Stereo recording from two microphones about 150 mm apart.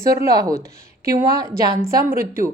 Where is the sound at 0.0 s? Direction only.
20° right (ahead or behind).